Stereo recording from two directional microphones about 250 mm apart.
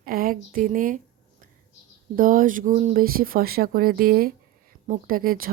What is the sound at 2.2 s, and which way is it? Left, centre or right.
Speech, right.